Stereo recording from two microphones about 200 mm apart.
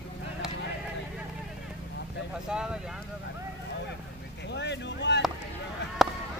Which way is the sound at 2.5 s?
5° right (ahead or behind).